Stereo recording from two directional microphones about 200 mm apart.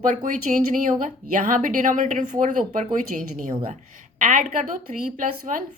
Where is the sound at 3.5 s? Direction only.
25° right (ahead or behind).